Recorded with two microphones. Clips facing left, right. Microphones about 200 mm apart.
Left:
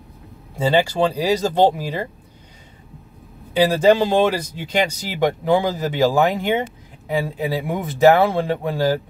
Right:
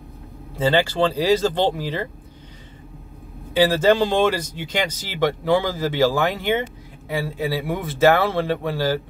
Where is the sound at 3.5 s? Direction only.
10° left (ahead or behind).